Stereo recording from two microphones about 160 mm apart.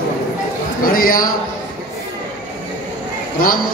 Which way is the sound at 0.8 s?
65° left (ahead or behind).